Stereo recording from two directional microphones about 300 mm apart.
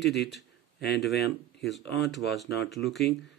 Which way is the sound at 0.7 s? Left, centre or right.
Left.